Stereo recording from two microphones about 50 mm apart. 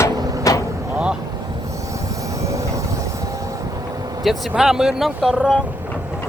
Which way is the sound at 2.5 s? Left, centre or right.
Right.